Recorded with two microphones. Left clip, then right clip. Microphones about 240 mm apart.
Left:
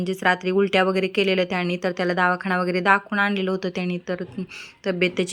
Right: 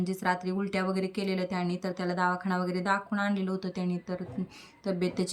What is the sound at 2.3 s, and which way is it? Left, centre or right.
Speech, left.